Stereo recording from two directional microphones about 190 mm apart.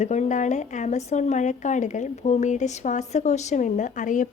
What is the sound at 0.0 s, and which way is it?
A woman's voice, 35° left (ahead or behind).